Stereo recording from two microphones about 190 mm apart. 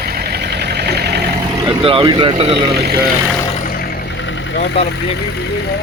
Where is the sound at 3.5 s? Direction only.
50° left (ahead or behind); by 4.8 s 65° left (ahead or behind).